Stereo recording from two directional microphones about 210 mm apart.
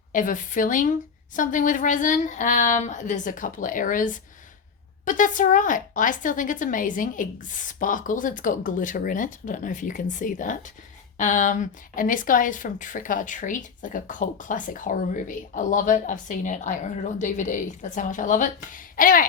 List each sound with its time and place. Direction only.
0.1 s speech: 40° left (ahead or behind)